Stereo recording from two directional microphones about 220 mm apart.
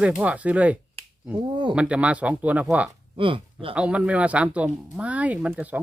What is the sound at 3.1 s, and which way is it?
Speech, 25° right (ahead or behind).